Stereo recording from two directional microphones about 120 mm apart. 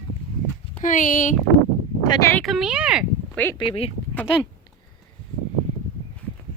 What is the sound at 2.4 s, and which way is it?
Speech, centre (ahead or behind).